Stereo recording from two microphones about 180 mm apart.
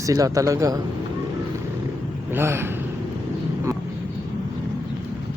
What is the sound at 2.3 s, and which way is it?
Speech, 15° right (ahead or behind).